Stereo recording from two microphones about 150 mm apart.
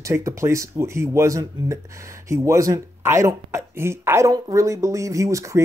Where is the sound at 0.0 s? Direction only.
20° right (ahead or behind).